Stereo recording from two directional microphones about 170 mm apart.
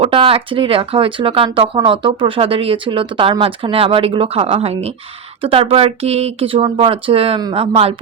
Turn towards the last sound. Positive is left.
turn(degrees=-35)  # may be behind; listen again after turning